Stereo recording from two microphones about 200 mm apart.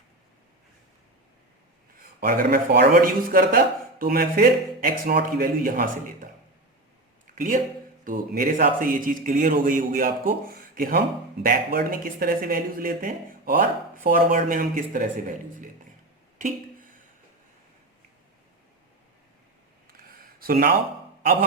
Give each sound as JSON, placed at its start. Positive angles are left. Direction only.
{"t": 2.2, "sound": "speech", "side_deg": -50}
{"t": 7.3, "sound": "speech", "side_deg": -40}
{"t": 19.9, "sound": "a sound", "side_deg": -45}